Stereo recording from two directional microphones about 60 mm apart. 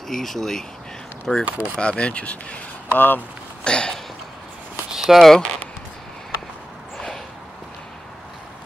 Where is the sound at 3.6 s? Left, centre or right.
Centre.